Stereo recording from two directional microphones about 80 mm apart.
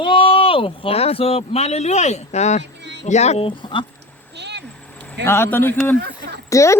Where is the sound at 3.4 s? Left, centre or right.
Left.